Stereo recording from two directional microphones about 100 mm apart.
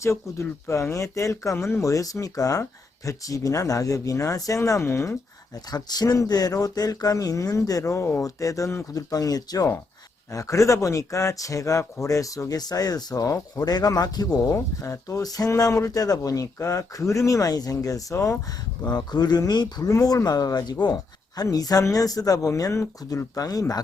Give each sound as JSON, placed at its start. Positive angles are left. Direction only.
{"t": 0.0, "sound": "speech", "side_deg": 30}
{"t": 5.7, "sound": "speech", "side_deg": 40}
{"t": 14.5, "sound": "speech", "side_deg": 30}
{"t": 18.8, "sound": "speech", "side_deg": 45}